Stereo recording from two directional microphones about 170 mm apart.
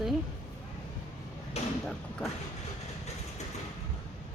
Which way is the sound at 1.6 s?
40° left (ahead or behind).